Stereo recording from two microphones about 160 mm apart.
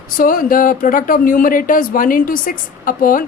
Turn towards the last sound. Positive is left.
turn(degrees=60)  # may be behind; listen again after turning